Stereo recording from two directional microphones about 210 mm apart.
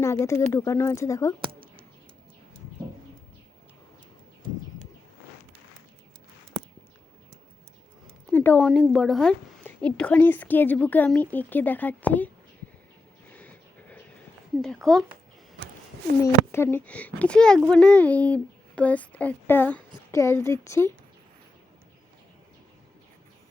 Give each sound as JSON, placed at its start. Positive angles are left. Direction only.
{"t": 0.0, "sound": "speech", "side_deg": 15}
{"t": 8.3, "sound": "speech", "side_deg": 10}
{"t": 13.3, "sound": "a sound", "side_deg": 5}
{"t": 14.6, "sound": "a child's voice", "side_deg": 0}
{"t": 16.5, "sound": "a child's voice", "side_deg": 10}